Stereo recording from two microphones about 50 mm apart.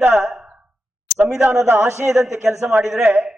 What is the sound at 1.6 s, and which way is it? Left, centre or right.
Speech, right.